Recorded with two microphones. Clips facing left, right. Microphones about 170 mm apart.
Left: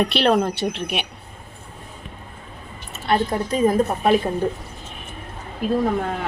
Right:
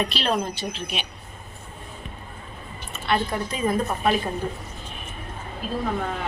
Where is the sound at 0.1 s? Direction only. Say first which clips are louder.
Left 7 dB; 65° left (ahead or behind).